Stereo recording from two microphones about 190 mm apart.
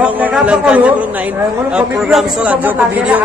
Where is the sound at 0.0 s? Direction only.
5° right (ahead or behind).